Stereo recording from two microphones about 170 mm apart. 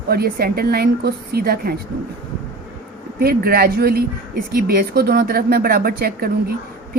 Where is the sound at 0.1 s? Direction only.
60° right (ahead or behind).